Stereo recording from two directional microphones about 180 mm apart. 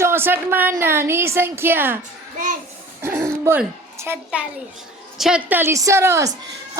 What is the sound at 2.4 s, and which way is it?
Speech, 45° right (ahead or behind).